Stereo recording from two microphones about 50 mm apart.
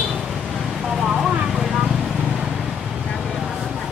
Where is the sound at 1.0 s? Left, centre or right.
Centre.